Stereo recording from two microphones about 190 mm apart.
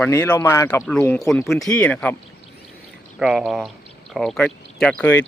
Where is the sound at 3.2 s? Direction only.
Centre (ahead or behind).